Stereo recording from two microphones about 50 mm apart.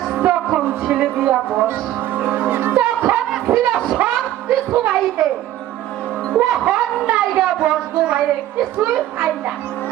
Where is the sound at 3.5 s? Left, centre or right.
Right.